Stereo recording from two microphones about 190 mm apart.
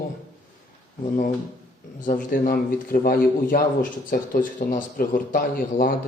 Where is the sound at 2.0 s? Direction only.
45° left (ahead or behind).